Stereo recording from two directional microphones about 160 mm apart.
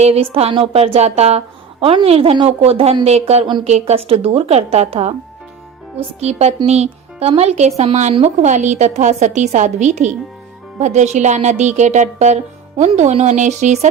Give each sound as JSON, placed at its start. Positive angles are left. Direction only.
{"t": 0.0, "sound": "a woman's voice", "side_deg": -40}
{"t": 3.4, "sound": "speech", "side_deg": -30}
{"t": 3.7, "sound": "a woman's voice", "side_deg": -40}